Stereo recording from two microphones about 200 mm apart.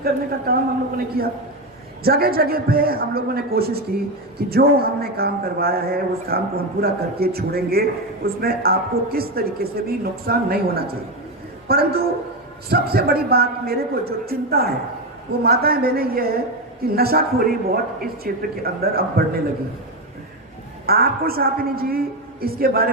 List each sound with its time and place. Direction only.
0.0 s a man's voice: 50° right (ahead or behind)
20.8 s a man's voice: 50° right (ahead or behind)